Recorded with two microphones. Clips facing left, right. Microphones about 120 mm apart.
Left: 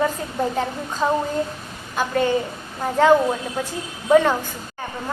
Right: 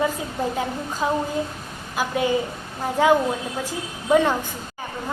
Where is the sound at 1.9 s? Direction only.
10° right (ahead or behind).